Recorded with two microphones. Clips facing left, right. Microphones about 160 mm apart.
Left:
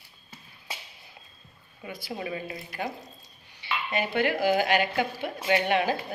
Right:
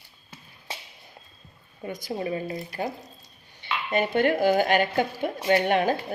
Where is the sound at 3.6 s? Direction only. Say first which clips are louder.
Right 4 dB; 50° right (ahead or behind).